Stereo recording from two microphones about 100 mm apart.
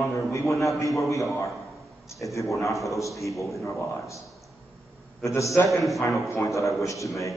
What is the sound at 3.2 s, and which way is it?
Speech, centre (ahead or behind).